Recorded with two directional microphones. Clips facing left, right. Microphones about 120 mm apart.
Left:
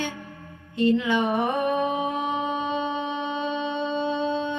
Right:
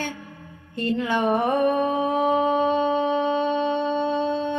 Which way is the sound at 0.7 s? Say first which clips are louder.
Left 2 dB; 45° right (ahead or behind).